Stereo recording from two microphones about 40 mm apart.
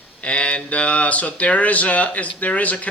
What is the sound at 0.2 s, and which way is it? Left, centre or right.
Speech, left.